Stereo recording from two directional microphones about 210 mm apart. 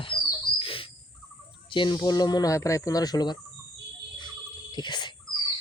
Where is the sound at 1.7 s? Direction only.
20° left (ahead or behind).